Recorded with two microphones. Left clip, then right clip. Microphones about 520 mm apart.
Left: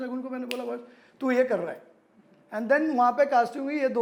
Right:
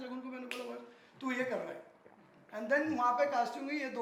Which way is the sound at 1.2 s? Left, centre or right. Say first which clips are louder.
Left 11 dB; left.